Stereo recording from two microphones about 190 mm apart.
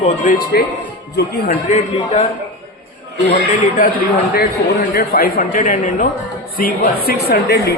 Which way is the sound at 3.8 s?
45° left (ahead or behind).